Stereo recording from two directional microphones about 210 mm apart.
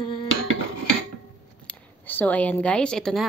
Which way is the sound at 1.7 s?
10° left (ahead or behind).